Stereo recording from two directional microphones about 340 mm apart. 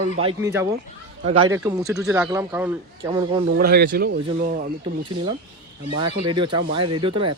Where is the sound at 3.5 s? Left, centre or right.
Right.